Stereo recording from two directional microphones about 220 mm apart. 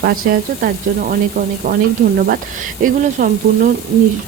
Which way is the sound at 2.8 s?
35° right (ahead or behind).